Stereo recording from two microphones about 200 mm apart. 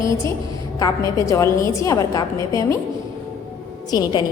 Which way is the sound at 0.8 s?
15° left (ahead or behind).